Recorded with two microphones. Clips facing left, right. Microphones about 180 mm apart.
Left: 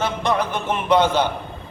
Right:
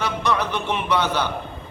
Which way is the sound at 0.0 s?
50° left (ahead or behind).